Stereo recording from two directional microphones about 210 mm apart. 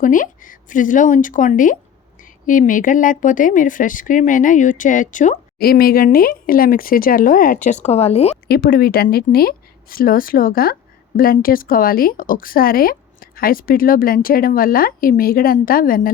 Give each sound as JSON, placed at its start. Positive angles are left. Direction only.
{"t": 0.0, "sound": "a woman's voice", "side_deg": 40}
{"t": 8.4, "sound": "a woman's voice", "side_deg": 45}